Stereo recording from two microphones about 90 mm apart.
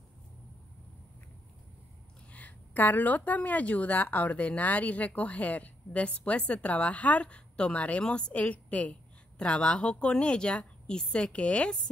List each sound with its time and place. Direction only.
2.3 s a woman's voice: 20° left (ahead or behind)